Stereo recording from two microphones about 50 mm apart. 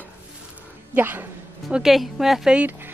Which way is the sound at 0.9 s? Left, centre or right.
Right.